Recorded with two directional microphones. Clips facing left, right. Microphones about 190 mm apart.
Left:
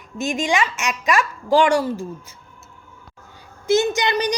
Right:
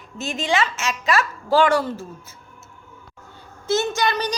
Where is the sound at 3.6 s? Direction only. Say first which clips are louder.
Left 3 dB; 15° left (ahead or behind).